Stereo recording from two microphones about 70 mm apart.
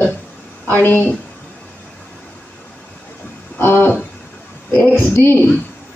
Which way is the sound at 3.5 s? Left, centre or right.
Left.